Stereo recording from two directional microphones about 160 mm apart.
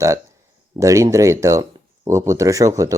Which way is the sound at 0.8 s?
20° right (ahead or behind).